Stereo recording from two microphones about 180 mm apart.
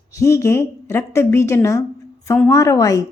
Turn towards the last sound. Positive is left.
turn(degrees=20)  # may be behind; listen again after turning